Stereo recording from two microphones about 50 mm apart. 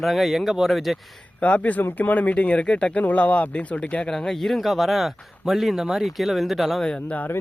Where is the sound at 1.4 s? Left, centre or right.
Left.